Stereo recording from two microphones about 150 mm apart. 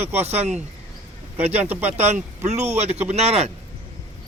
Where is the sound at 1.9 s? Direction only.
50° right (ahead or behind).